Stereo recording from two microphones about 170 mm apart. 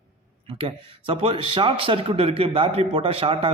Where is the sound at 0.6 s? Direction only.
35° right (ahead or behind).